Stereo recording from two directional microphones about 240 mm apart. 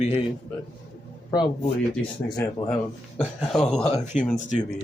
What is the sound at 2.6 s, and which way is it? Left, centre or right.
Speech, centre.